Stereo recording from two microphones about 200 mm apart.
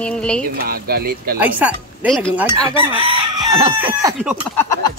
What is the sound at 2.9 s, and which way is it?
Chicken, 25° right (ahead or behind).